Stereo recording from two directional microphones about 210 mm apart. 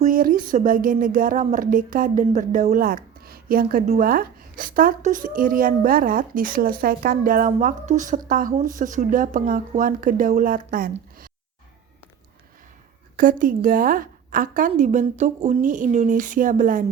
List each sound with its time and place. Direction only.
0.0 s speech: 40° right (ahead or behind)
13.1 s speech: 40° right (ahead or behind)